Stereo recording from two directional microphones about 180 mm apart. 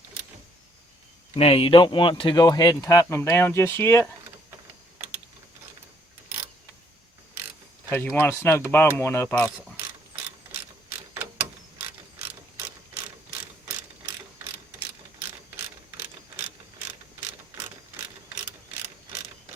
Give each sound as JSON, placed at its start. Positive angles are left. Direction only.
{"t": 1.4, "sound": "speech", "side_deg": 30}
{"t": 7.9, "sound": "speech", "side_deg": 10}
{"t": 11.1, "sound": "a sound", "side_deg": -10}